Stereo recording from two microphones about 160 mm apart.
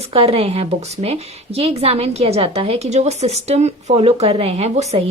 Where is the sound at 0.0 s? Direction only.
40° right (ahead or behind).